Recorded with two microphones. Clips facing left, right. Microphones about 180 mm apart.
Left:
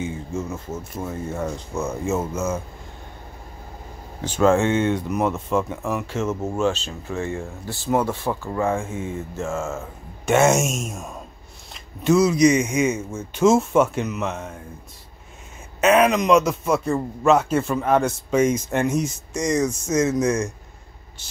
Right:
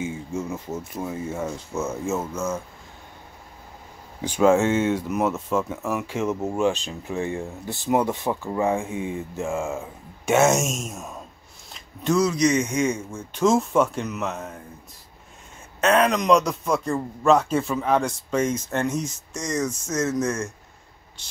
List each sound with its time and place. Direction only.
0.0 s a sound: 10° right (ahead or behind)
0.7 s speech: 5° right (ahead or behind)
4.2 s speech: 10° right (ahead or behind)
10.3 s speech: centre (ahead or behind)
15.8 s a man's voice: 5° left (ahead or behind)